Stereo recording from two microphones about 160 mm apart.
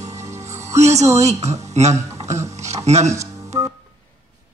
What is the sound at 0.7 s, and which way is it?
Speech, 45° right (ahead or behind).